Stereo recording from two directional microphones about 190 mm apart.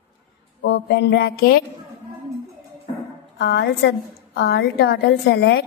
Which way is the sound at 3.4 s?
65° left (ahead or behind).